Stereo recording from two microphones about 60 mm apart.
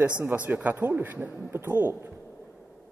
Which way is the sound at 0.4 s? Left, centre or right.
Right.